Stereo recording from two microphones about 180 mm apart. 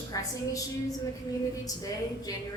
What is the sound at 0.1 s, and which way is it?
Speech, 20° left (ahead or behind).